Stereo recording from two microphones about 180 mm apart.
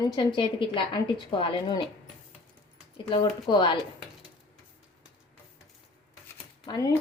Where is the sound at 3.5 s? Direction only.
25° left (ahead or behind).